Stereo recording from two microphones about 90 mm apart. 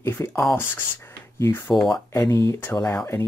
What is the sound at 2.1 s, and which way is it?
Speech, 35° left (ahead or behind).